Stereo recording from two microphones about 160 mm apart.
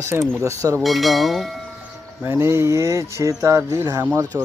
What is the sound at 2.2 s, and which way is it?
Speech, 15° right (ahead or behind).